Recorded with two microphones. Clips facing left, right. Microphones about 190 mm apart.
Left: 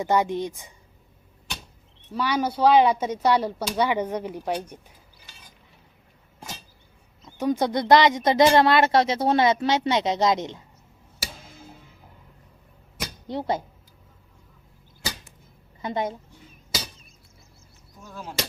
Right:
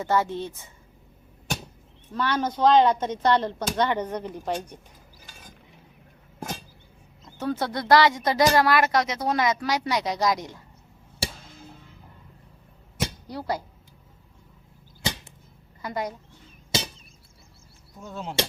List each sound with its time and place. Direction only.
0.0 s a woman's voice: 15° left (ahead or behind)
2.1 s a woman's voice: 10° left (ahead or behind)
5.2 s mechanisms: 50° right (ahead or behind)
7.3 s a woman's voice: 15° left (ahead or behind)
11.2 s music: 30° right (ahead or behind)
13.2 s a woman's voice: 20° left (ahead or behind)
15.8 s a woman's voice: 25° left (ahead or behind)
18.0 s chop: 25° right (ahead or behind)